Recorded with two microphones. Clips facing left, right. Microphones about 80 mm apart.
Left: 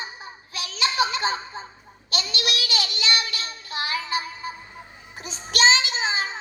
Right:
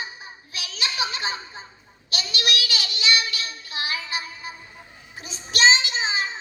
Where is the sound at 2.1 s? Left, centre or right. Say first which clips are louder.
Right 1 dB; left.